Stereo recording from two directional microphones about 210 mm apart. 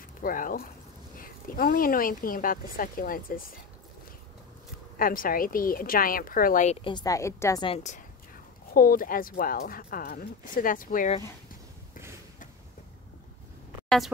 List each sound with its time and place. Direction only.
0.2 s a woman's voice: 40° left (ahead or behind)
4.9 s a woman's voice: 40° left (ahead or behind); by 7.6 s 15° left (ahead or behind)
7.6 s speech: 30° left (ahead or behind)
8.7 s a woman's voice: 40° left (ahead or behind)
13.8 s speech: centre (ahead or behind)